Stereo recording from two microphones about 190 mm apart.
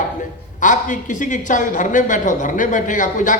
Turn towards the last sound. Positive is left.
turn(degrees=40)  # may be behind; listen again after turning